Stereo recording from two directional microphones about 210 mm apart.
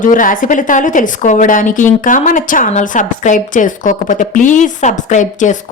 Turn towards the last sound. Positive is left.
turn(degrees=35)  # may be behind; listen again after turning